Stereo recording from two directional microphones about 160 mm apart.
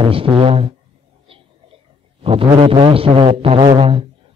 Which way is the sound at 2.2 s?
35° right (ahead or behind).